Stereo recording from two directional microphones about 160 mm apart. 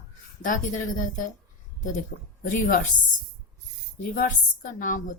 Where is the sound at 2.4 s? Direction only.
60° left (ahead or behind).